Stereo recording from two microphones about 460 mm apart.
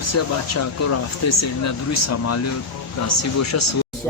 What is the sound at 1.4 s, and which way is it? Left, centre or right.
Speech, left.